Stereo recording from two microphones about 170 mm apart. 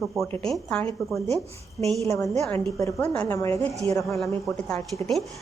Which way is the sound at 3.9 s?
20° left (ahead or behind).